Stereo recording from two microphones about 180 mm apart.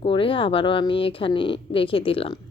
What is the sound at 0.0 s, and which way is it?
A woman's voice, 30° left (ahead or behind).